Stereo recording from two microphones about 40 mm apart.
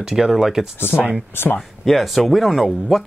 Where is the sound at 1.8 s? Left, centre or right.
Centre.